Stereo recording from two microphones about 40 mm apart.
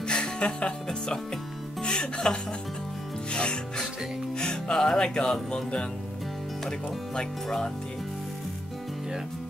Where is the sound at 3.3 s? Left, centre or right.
Left.